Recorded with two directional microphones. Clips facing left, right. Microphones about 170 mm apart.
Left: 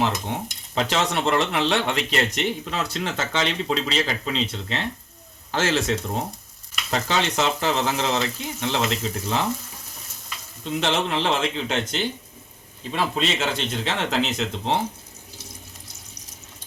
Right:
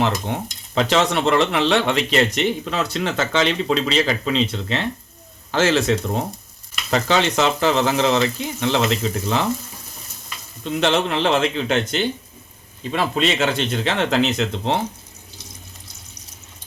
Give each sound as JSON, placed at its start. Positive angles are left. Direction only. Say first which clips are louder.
{"t": 0.3, "sound": "speech", "louder": "right 3 dB", "side_deg": -65}
{"t": 0.8, "sound": "speech", "louder": "right 5 dB", "side_deg": -90}
{"t": 10.6, "sound": "speech", "louder": "right 4 dB", "side_deg": -65}